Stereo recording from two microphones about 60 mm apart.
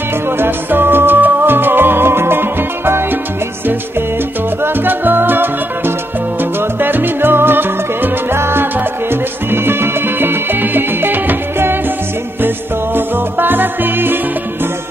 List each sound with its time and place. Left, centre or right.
0.4 s music: right
4.8 s music: right